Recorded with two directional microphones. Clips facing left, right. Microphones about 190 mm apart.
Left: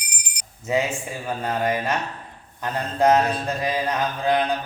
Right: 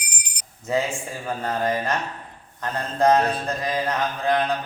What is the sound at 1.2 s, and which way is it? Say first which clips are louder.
Mantra: left 1 dB; 10° left (ahead or behind).